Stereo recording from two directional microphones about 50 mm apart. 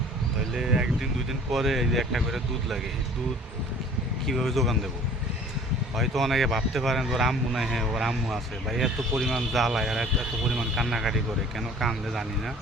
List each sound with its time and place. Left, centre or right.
0.5 s speech: centre
1.3 s speech: centre
4.3 s speech: centre
6.0 s speech: centre